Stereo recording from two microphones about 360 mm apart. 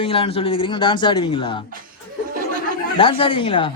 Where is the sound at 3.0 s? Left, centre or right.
Centre.